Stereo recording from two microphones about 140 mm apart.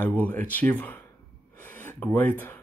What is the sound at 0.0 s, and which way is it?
Speech, 10° left (ahead or behind).